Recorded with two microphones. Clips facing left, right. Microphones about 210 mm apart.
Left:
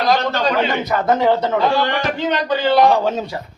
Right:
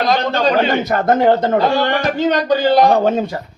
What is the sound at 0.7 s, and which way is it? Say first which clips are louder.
Speech: right 3 dB; 50° right (ahead or behind).